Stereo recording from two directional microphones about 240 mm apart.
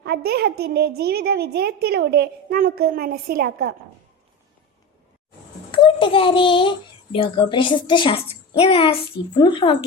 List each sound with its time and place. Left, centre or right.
0.0 s a woman's voice: right
5.7 s a child's voice: left